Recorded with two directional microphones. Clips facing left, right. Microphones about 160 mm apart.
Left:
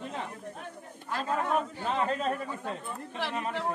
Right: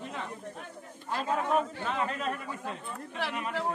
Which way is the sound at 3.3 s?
35° left (ahead or behind).